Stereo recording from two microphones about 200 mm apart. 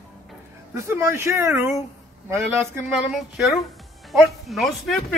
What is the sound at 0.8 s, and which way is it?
Speech, 15° right (ahead or behind).